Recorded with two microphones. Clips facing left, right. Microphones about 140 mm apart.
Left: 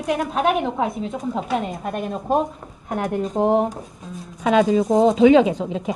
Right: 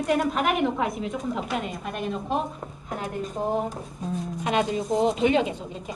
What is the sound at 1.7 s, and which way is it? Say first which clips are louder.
Speech: left 4 dB; 45° left (ahead or behind).